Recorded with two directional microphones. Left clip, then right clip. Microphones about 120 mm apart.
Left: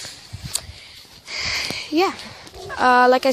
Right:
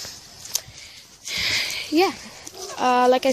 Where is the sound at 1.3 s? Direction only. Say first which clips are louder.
Right 1 dB; 25° right (ahead or behind).